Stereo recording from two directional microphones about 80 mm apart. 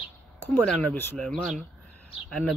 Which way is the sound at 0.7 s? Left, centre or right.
Centre.